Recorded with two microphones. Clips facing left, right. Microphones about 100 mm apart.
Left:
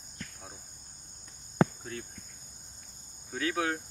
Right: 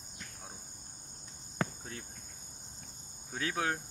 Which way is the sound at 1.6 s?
20° left (ahead or behind).